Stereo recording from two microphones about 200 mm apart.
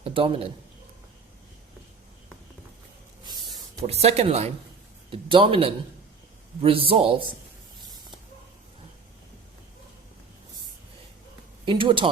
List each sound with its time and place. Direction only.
0.0 s a man's voice: 25° right (ahead or behind)
3.2 s a sound: 20° right (ahead or behind)
5.1 s a man's voice: 25° right (ahead or behind)
11.6 s speech: 25° right (ahead or behind)